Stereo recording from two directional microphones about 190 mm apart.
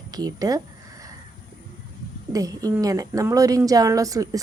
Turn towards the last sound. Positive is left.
turn(degrees=-20)  # may be behind; listen again after turning